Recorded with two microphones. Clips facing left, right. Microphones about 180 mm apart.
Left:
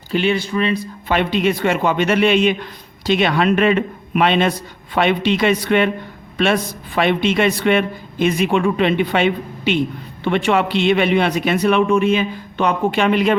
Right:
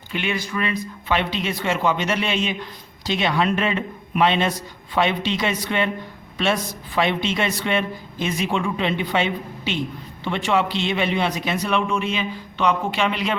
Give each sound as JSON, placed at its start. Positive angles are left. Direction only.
{"t": 0.1, "sound": "speech", "side_deg": 30}
{"t": 1.0, "sound": "a man's voice", "side_deg": 50}